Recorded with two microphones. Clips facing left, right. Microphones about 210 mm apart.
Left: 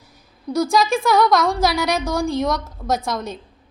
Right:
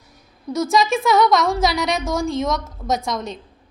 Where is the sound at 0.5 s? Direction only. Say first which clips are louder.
Left 1 dB; centre (ahead or behind).